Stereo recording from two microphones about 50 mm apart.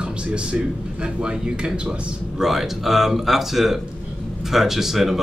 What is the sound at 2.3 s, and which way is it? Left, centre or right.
Speech, centre.